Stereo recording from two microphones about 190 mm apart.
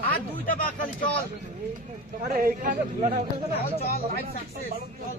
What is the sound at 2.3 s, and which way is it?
Speech, 50° right (ahead or behind).